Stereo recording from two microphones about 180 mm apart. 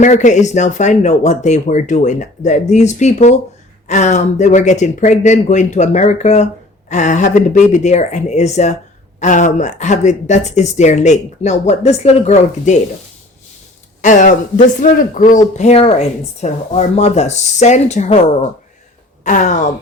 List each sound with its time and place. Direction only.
0.0 s speech: 45° left (ahead or behind)
14.0 s speech: 45° left (ahead or behind)
19.2 s speech: 40° left (ahead or behind)